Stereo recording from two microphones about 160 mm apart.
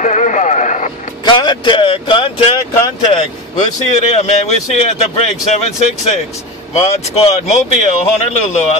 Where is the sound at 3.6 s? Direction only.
45° left (ahead or behind).